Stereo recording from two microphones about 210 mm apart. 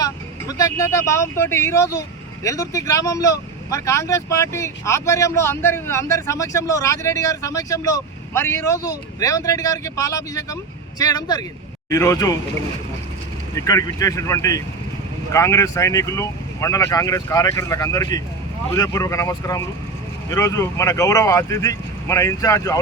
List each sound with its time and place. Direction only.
0.0 s speech: 15° left (ahead or behind)
13.6 s speech: 15° left (ahead or behind)